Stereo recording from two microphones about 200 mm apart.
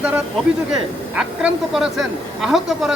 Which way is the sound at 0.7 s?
5° right (ahead or behind).